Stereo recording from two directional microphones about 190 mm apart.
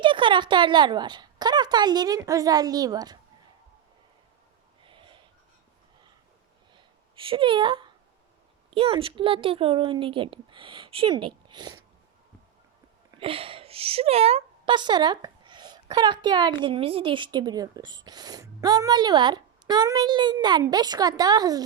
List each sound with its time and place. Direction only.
0.0 s a woman's voice: 25° right (ahead or behind)
4.9 s snort: 25° right (ahead or behind)
6.7 s a sound: 25° right (ahead or behind)
8.7 s speech: 30° right (ahead or behind)
13.1 s speech: 30° right (ahead or behind)